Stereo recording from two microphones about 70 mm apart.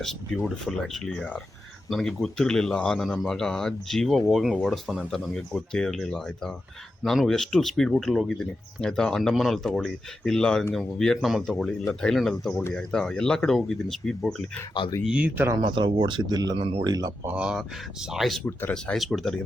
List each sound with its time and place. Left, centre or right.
0.0 s speech: centre
15.0 s speech: centre
15.6 s speech: right
17.3 s speech: centre
17.6 s speech: centre